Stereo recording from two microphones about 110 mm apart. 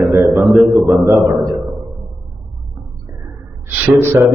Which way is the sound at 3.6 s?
15° right (ahead or behind).